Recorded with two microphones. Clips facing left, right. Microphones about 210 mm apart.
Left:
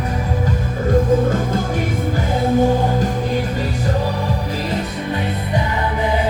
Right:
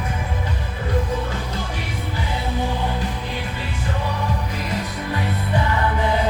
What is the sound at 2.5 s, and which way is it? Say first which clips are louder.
Music: left 9 dB; 45° left (ahead or behind).